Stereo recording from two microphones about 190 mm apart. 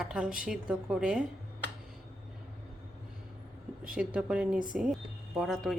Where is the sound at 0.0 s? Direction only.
5° right (ahead or behind).